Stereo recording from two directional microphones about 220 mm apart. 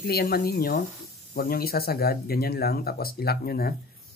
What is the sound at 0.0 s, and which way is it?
Speech, 45° left (ahead or behind).